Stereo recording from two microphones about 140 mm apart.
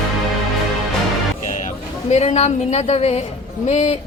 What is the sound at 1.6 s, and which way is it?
A woman's voice, 55° left (ahead or behind).